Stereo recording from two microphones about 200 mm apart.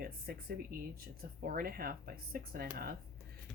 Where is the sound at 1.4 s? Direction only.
45° right (ahead or behind).